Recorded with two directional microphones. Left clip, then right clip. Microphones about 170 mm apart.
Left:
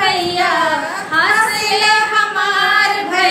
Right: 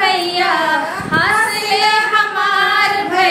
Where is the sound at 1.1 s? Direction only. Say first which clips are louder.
Left 1 dB; 15° right (ahead or behind).